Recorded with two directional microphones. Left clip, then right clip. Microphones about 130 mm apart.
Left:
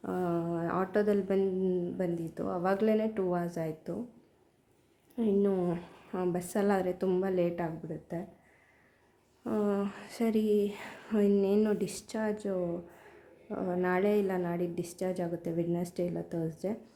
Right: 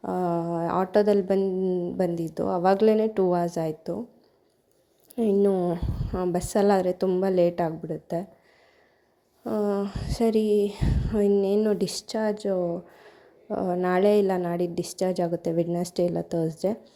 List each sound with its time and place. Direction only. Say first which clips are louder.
0.0 s a sound: right 6 dB; 35° right (ahead or behind)
1.4 s a sound: right 5 dB; 25° right (ahead or behind)
2.0 s a woman's voice: right 8 dB; 40° right (ahead or behind)
5.1 s speech: right 7 dB; 45° right (ahead or behind)
5.5 s speech: right 7 dB; 25° right (ahead or behind)
6.3 s a woman's voice: right 10 dB; 40° right (ahead or behind)
9.4 s a woman's voice: right 5 dB; 20° right (ahead or behind); by 16.7 s 45° right (ahead or behind)